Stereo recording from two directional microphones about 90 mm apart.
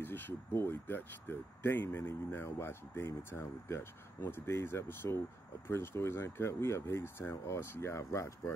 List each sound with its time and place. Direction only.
0.0 s speech: 25° left (ahead or behind)